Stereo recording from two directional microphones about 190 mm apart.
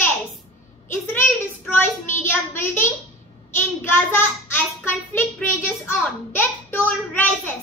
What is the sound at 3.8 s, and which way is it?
Child singing, 10° left (ahead or behind).